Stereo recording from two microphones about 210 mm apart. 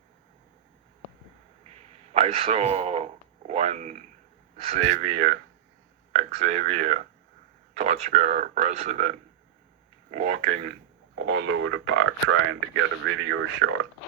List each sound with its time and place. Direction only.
2.1 s speech: 30° right (ahead or behind)
4.9 s speech: 50° right (ahead or behind)
6.1 s speech: 30° right (ahead or behind)
10.7 s speech: 65° right (ahead or behind)